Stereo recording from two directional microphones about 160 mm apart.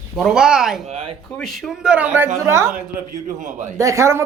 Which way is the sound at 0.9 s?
40° right (ahead or behind).